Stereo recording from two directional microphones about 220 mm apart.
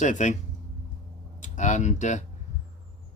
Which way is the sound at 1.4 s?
35° left (ahead or behind).